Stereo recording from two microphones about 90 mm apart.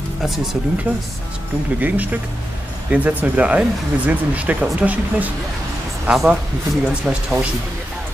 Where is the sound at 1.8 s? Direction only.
20° right (ahead or behind).